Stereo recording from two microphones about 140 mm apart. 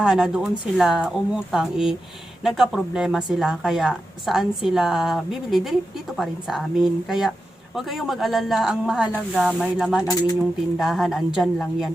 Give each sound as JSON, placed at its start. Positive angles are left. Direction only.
{"t": 0.0, "sound": "speech", "side_deg": -5}
{"t": 10.0, "sound": "speech", "side_deg": 25}
{"t": 10.8, "sound": "speech", "side_deg": 0}